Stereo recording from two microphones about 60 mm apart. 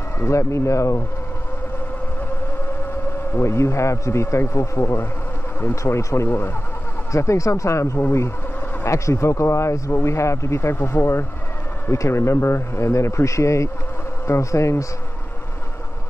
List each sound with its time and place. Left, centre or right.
0.2 s speech: left
3.3 s speech: left
6.2 s speech: left
7.1 s speech: left